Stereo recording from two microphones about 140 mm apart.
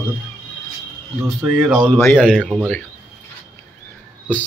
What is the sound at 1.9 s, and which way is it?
Speech, 10° left (ahead or behind).